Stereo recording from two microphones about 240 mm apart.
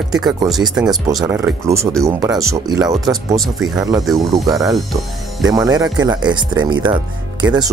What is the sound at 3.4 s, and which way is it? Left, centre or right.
Speech, centre.